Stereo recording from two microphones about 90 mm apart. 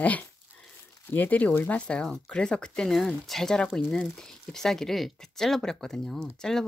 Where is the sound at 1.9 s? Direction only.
10° left (ahead or behind).